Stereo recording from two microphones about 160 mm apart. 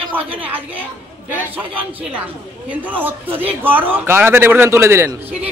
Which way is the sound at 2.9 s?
10° right (ahead or behind).